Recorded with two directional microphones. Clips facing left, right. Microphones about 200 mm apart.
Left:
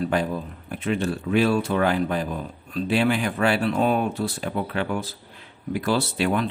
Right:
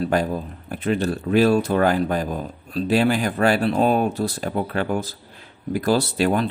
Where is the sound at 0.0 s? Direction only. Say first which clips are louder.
Right 2 dB; 40° right (ahead or behind).